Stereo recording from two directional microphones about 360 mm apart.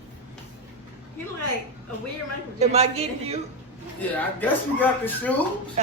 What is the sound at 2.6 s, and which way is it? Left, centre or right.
Speech, centre.